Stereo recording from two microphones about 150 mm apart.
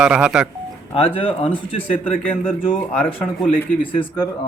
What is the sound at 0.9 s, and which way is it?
Speech, 40° left (ahead or behind).